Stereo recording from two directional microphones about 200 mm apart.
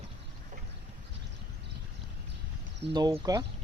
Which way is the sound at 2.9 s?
20° right (ahead or behind).